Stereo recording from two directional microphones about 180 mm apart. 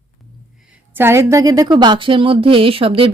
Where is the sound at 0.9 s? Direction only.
15° right (ahead or behind).